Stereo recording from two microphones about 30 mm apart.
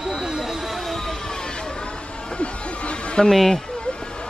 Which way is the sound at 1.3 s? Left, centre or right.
Left.